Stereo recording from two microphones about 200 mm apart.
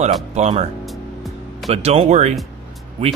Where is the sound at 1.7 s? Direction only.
30° right (ahead or behind).